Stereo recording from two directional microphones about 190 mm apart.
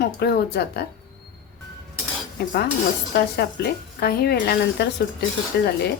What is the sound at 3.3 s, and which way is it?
Speech, 55° left (ahead or behind).